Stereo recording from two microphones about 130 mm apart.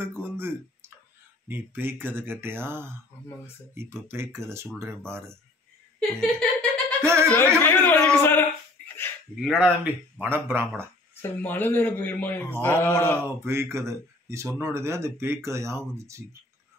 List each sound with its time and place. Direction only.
0.0 s speech: 15° right (ahead or behind)
5.9 s speech: 5° left (ahead or behind)
7.0 s speech: 20° right (ahead or behind)
7.2 s speech: 15° left (ahead or behind)
9.4 s speech: 5° right (ahead or behind)
11.1 s a man's voice: 15° left (ahead or behind)
13.2 s speech: 20° right (ahead or behind)